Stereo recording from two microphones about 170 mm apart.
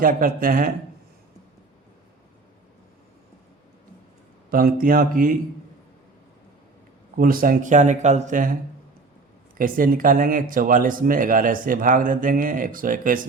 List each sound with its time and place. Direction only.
0.0 s speech: 55° right (ahead or behind)
4.5 s speech: 60° right (ahead or behind)
7.2 s speech: 55° right (ahead or behind)
9.6 s speech: 55° right (ahead or behind)